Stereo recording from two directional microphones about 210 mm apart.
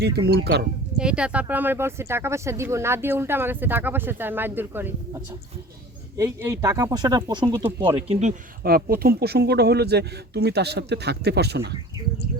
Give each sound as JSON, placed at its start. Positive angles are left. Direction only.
{"t": 0.3, "sound": "speech", "side_deg": -50}
{"t": 0.9, "sound": "speech", "side_deg": -5}
{"t": 7.9, "sound": "speech", "side_deg": -30}